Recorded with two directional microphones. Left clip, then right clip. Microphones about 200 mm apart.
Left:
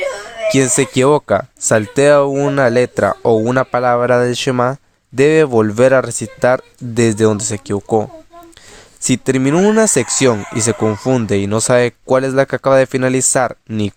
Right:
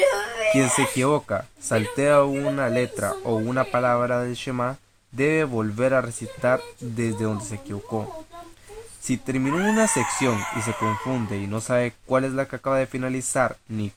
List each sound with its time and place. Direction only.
0.5 s speech: 45° left (ahead or behind)